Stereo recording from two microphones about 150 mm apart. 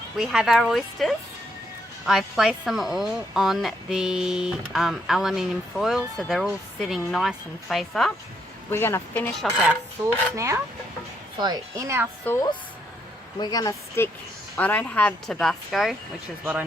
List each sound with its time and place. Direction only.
0.2 s a woman's voice: centre (ahead or behind)
8.7 s speech: 15° left (ahead or behind)
10.0 s speech: 20° right (ahead or behind)
12.2 s a woman's voice: 15° left (ahead or behind)
14.5 s speech: 10° left (ahead or behind)